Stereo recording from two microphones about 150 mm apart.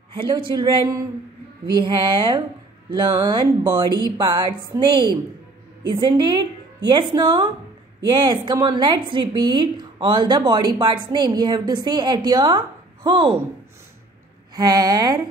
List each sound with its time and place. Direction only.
0.1 s a woman's voice: 35° right (ahead or behind)
14.5 s a woman's voice: 25° right (ahead or behind)